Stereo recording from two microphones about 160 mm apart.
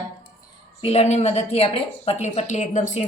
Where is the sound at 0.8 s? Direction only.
40° left (ahead or behind).